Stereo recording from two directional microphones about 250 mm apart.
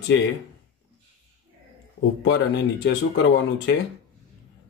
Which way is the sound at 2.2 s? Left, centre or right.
Left.